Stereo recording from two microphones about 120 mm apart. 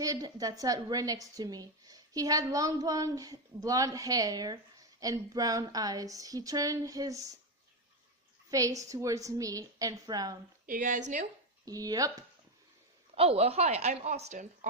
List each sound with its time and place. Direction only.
0.0 s a woman's voice: 30° right (ahead or behind)
8.4 s a woman's voice: 30° right (ahead or behind)
10.8 s speech: 90° right
11.6 s a woman's voice: 30° right (ahead or behind)
13.1 s speech: 55° right (ahead or behind); by 14.7 s 80° right